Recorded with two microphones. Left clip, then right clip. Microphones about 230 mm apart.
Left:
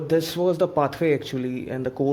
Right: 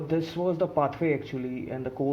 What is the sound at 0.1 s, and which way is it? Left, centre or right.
A man's voice, left.